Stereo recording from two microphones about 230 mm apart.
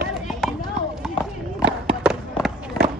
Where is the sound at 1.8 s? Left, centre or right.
Centre.